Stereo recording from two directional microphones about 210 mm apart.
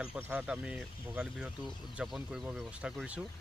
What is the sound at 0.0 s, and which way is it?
Speech, 5° right (ahead or behind).